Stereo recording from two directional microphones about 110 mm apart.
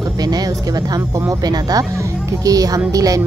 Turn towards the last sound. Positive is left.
turn(degrees=-35)  # may be behind; listen again after turning